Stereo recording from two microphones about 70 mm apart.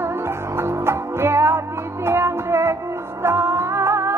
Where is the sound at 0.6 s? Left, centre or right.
Right.